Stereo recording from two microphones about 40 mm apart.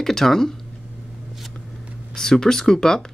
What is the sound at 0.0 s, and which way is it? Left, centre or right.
Speech, centre.